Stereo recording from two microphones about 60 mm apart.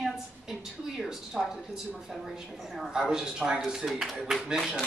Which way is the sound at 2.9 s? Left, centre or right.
Centre.